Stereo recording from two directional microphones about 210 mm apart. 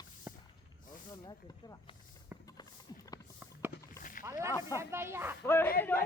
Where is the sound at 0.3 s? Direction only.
10° right (ahead or behind).